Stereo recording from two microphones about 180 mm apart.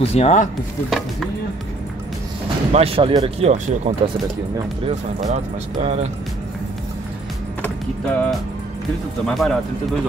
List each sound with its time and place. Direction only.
0.0 s speech: 35° left (ahead or behind)
2.7 s speech: 30° right (ahead or behind)
7.6 s music: 10° left (ahead or behind)
9.2 s speech: centre (ahead or behind)